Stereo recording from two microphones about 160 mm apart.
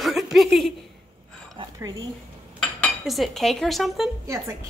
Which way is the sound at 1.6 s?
30° right (ahead or behind).